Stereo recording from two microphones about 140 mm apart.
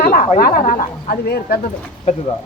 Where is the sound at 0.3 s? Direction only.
90° left.